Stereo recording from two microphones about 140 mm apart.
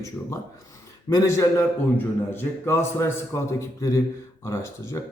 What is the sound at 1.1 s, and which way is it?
A man's voice, 20° left (ahead or behind).